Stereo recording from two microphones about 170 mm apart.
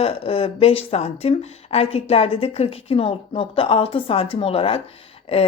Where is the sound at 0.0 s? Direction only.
35° left (ahead or behind).